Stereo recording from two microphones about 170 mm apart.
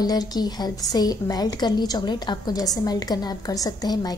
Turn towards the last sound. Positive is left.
turn(degrees=25)  # may be behind; listen again after turning